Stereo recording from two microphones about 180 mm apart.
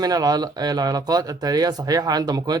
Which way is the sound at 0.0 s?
20° right (ahead or behind).